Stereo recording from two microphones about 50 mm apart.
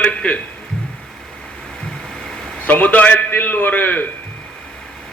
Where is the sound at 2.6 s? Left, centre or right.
Left.